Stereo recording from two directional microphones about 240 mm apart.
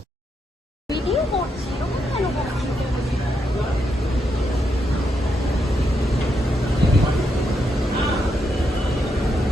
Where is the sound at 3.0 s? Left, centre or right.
Centre.